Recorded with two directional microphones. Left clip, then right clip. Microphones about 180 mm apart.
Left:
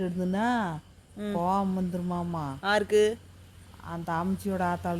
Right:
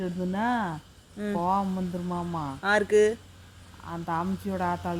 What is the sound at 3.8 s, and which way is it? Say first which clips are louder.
Speech: right 1 dB; 55° left (ahead or behind).